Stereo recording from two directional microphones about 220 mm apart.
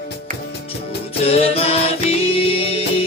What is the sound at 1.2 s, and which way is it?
Music, 25° left (ahead or behind).